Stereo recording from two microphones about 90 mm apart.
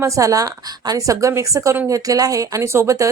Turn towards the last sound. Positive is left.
turn(degrees=-35)  # may be behind; listen again after turning